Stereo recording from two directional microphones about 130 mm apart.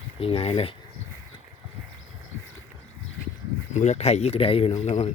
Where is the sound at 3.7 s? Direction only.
60° left (ahead or behind).